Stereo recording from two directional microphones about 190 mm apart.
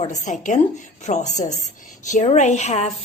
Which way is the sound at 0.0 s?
40° left (ahead or behind).